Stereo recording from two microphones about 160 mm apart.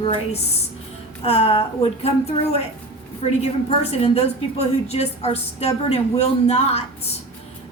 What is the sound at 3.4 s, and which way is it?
A woman's voice, 40° left (ahead or behind).